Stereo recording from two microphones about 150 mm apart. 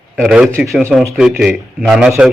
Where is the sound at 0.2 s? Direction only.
5° right (ahead or behind).